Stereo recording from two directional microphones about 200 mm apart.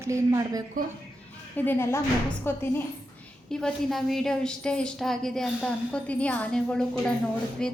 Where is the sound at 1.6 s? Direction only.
10° left (ahead or behind).